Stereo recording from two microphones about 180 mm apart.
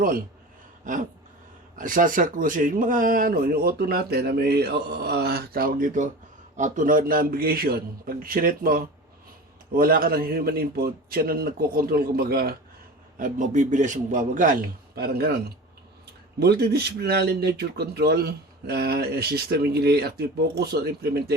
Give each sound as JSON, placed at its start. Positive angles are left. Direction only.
{"t": 0.9, "sound": "speech", "side_deg": -45}
{"t": 13.1, "sound": "speech", "side_deg": -45}
{"t": 16.4, "sound": "speech", "side_deg": -65}